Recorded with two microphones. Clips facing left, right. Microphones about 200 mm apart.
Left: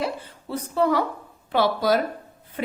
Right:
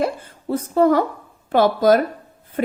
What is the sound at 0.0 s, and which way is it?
A woman's voice, 50° right (ahead or behind).